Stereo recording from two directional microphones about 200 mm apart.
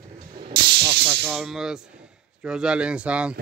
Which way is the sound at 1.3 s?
Centre (ahead or behind).